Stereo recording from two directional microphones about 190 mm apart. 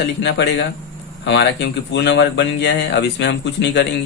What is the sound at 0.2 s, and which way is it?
Speech, 65° left (ahead or behind).